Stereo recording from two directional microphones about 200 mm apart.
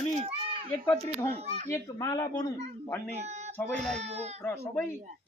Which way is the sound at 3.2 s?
35° right (ahead or behind).